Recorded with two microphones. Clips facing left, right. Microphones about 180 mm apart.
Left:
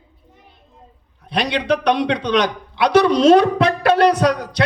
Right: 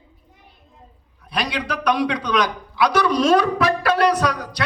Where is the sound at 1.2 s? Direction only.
25° left (ahead or behind).